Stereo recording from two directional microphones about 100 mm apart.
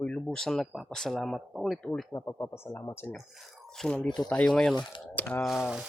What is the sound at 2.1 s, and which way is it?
Speech, 30° left (ahead or behind).